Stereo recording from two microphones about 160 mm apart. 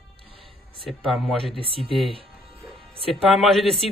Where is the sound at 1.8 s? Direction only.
35° left (ahead or behind).